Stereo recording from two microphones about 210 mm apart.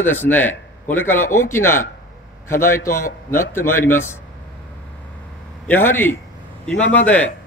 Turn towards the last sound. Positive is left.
turn(degrees=5)  # may be behind; listen again after turning